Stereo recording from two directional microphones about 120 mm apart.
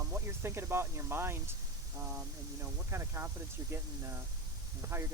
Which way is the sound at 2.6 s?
20° right (ahead or behind).